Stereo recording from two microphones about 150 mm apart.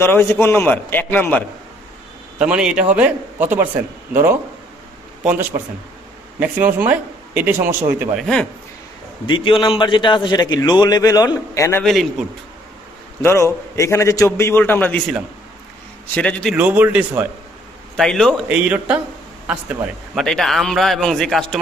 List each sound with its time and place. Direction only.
0.0 s a man's voice: 15° left (ahead or behind)
2.4 s a man's voice: 5° right (ahead or behind)
9.2 s a man's voice: 35° left (ahead or behind)
11.8 s a man's voice: centre (ahead or behind)
13.2 s a man's voice: 20° left (ahead or behind)
16.1 s a man's voice: 5° left (ahead or behind)
16.6 s a man's voice: 10° right (ahead or behind)
17.9 s a man's voice: 5° left (ahead or behind)
18.4 s a man's voice: 5° right (ahead or behind)
20.1 s a man's voice: centre (ahead or behind)